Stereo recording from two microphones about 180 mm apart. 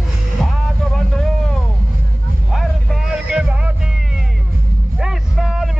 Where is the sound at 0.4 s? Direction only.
Centre (ahead or behind).